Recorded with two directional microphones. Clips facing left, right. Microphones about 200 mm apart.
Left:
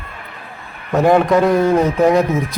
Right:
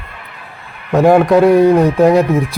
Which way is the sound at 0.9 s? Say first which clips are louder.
Right 3 dB; 10° right (ahead or behind).